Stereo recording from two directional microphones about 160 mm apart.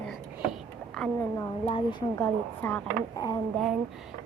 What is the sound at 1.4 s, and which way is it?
Speech, 30° left (ahead or behind).